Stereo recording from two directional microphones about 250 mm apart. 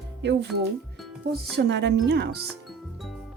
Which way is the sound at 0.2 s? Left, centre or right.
Right.